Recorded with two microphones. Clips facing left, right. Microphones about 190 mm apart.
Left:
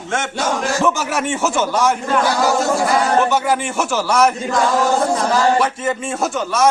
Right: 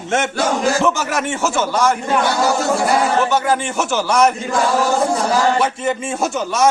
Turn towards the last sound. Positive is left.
turn(degrees=0)  # may be behind; listen again after turning